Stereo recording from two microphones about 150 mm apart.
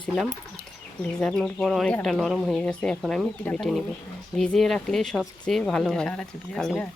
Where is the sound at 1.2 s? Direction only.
5° left (ahead or behind).